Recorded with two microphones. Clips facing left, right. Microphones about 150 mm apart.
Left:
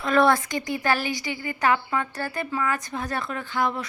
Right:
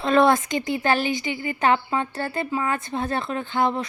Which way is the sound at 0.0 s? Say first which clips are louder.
Right 2 dB; 25° right (ahead or behind).